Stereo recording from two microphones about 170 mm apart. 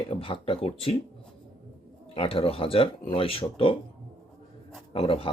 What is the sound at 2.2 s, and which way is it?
Speech, 35° left (ahead or behind).